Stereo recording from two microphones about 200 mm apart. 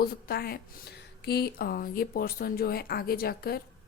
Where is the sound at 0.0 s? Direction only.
50° left (ahead or behind).